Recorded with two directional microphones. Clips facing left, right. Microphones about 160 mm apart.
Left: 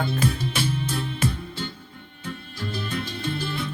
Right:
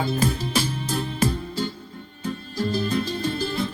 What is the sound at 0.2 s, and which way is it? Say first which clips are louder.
Music: right 2 dB; 40° right (ahead or behind).